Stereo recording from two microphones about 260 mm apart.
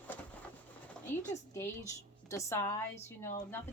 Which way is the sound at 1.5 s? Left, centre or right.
Centre.